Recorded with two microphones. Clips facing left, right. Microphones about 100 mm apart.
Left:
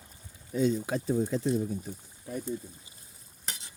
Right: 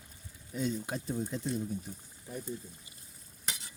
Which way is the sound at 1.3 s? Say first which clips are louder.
Left 7 dB; 90° left.